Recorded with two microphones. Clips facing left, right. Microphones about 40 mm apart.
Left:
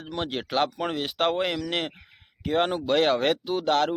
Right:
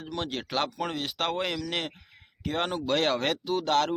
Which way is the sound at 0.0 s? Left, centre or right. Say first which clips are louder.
Left 3 dB; centre.